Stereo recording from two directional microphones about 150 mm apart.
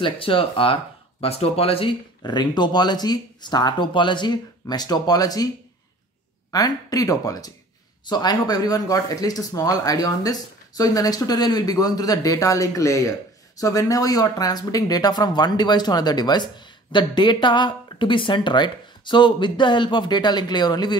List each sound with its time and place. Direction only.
0.0 s speech: 35° left (ahead or behind)
6.5 s speech: 25° left (ahead or behind)